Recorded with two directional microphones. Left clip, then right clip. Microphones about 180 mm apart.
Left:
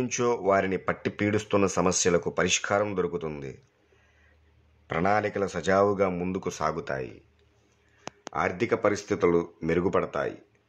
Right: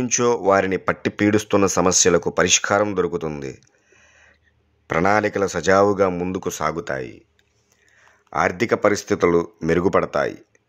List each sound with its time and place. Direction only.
0.0 s speech: 30° right (ahead or behind)
4.8 s speech: 40° right (ahead or behind)
8.2 s speech: 40° right (ahead or behind)